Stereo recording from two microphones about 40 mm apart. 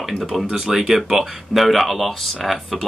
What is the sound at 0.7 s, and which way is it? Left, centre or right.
Speech, centre.